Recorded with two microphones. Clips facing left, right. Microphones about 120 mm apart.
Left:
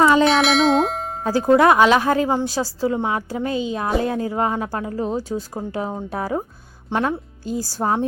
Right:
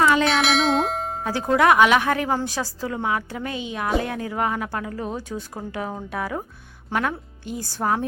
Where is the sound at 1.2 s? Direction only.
30° left (ahead or behind).